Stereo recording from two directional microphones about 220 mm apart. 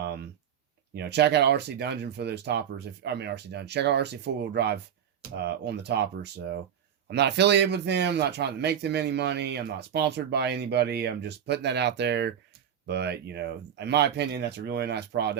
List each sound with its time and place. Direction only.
0.9 s speech: 50° right (ahead or behind)